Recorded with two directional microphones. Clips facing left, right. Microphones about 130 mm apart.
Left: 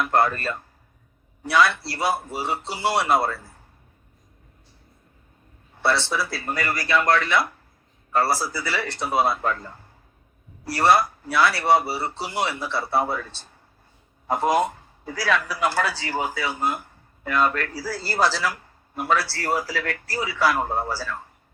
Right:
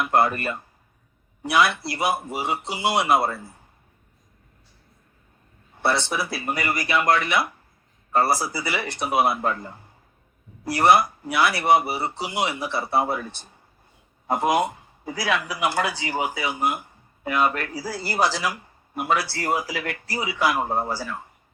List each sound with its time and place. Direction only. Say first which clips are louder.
0.0 s speech: even; 15° right (ahead or behind)
5.8 s speech: even; 15° right (ahead or behind)